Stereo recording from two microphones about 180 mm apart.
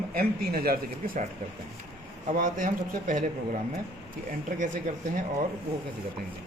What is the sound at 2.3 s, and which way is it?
Speech, 50° right (ahead or behind).